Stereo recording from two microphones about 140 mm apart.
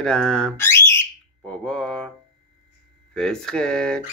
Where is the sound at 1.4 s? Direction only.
5° left (ahead or behind).